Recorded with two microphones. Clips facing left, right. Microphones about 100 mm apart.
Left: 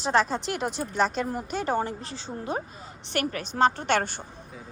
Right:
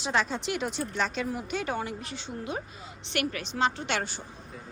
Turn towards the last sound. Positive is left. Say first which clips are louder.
# left 6 dB
turn(degrees=50)  # may be behind; listen again after turning